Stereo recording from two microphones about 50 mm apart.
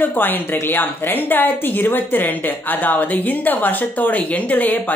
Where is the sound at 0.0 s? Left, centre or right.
Left.